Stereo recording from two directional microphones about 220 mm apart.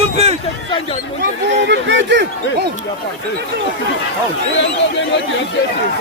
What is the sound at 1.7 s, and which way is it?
Speech, 55° right (ahead or behind).